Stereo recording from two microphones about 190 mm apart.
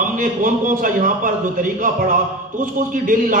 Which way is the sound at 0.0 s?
45° right (ahead or behind).